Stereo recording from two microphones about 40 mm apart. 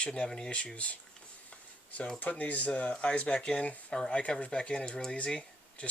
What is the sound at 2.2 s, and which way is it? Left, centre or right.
Speech, left.